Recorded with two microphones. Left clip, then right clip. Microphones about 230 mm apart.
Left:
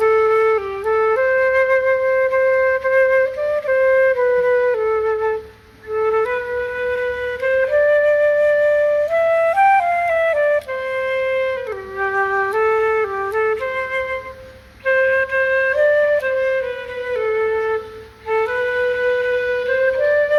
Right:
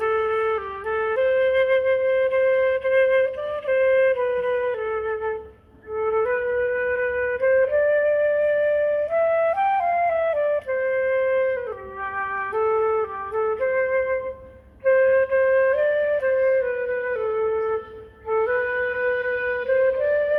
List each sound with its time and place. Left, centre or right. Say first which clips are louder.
0.0 s flute: left 7 dB; centre
6.0 s flute: left 4 dB; left
18.3 s music: left 3 dB; left